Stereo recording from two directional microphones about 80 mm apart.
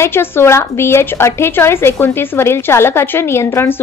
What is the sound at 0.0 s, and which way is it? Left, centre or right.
A woman's voice, left.